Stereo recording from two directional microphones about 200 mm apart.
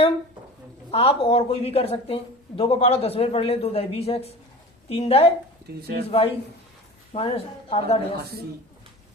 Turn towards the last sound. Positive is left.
turn(degrees=30)  # may be behind; listen again after turning